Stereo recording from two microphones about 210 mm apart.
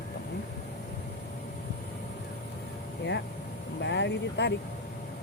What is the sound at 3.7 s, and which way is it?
Vehicle, 55° left (ahead or behind).